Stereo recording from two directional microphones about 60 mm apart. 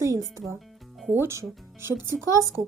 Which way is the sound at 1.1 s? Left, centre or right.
Right.